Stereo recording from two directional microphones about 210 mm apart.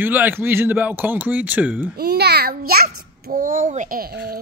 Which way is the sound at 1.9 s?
50° right (ahead or behind).